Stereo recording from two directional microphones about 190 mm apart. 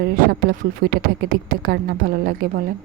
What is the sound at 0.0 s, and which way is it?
A woman's voice, 50° right (ahead or behind).